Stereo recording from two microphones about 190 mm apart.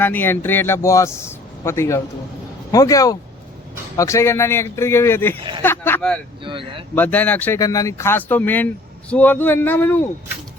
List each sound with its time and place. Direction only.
0.0 s speech: 10° left (ahead or behind)
6.4 s speech: 25° right (ahead or behind)
6.9 s speech: 10° left (ahead or behind)